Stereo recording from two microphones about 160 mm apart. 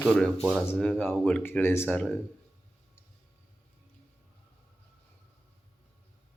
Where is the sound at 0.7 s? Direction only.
5° left (ahead or behind).